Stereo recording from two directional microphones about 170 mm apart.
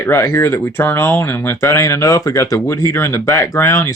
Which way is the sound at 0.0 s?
15° left (ahead or behind).